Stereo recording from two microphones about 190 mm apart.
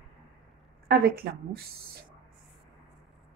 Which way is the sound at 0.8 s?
55° right (ahead or behind).